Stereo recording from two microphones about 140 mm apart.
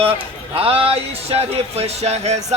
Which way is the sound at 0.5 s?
45° right (ahead or behind).